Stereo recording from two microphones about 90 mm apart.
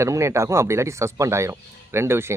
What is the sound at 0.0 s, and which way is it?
A man's voice, 30° right (ahead or behind).